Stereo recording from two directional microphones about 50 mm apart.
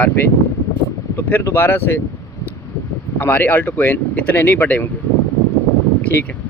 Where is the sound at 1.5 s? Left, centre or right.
Left.